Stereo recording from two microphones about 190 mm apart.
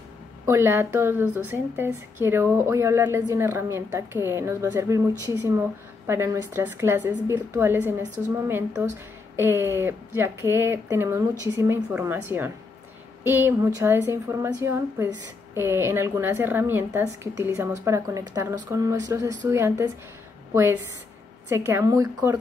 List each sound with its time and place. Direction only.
0.5 s a woman's voice: 15° right (ahead or behind)
21.5 s a woman's voice: 15° right (ahead or behind)